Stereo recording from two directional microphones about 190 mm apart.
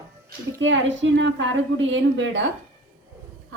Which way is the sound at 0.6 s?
75° right (ahead or behind).